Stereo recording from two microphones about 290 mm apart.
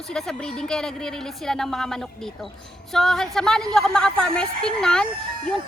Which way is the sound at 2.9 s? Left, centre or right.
Centre.